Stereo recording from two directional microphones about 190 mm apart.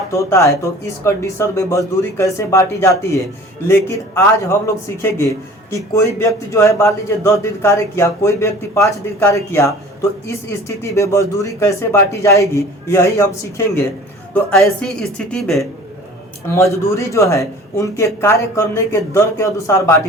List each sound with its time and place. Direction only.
0.1 s speech: 15° left (ahead or behind)
14.3 s speech: 5° left (ahead or behind)
16.5 s speech: 15° left (ahead or behind)